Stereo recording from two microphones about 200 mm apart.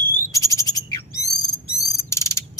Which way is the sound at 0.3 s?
15° left (ahead or behind).